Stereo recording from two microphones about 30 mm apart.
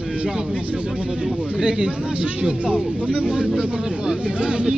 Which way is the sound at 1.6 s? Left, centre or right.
Right.